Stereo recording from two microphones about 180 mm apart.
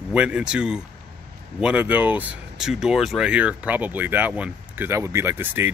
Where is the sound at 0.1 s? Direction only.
5° right (ahead or behind).